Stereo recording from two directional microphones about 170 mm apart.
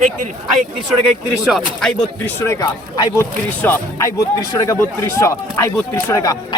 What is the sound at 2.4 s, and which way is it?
Speech, 20° left (ahead or behind).